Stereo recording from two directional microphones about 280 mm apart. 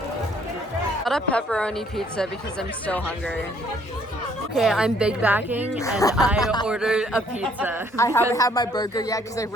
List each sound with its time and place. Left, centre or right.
1.0 s speech: centre
4.5 s speech: centre
6.0 s speech: centre
6.7 s speech: centre
7.9 s speech: centre